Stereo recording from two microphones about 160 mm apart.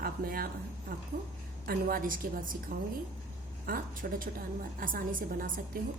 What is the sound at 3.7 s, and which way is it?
A woman's voice, 65° right (ahead or behind).